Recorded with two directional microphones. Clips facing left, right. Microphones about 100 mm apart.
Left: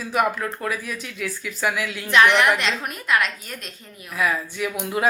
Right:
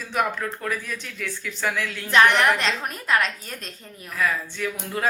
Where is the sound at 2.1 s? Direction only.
40° right (ahead or behind).